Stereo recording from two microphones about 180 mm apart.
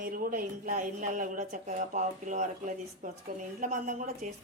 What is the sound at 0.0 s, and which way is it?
Speech, 50° right (ahead or behind).